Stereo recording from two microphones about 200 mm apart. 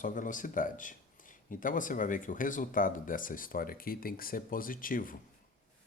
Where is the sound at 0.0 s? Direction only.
40° left (ahead or behind).